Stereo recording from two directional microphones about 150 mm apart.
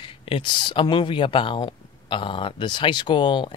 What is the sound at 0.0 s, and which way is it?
Speech, 35° left (ahead or behind).